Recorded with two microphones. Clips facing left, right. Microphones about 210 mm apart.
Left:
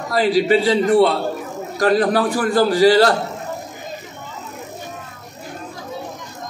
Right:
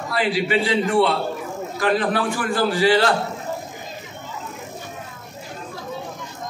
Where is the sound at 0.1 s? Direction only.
40° left (ahead or behind).